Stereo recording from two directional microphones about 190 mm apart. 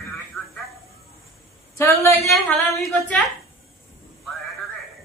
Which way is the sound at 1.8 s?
15° left (ahead or behind).